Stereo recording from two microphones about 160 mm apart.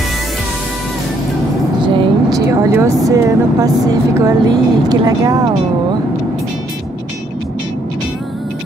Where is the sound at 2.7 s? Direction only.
20° right (ahead or behind).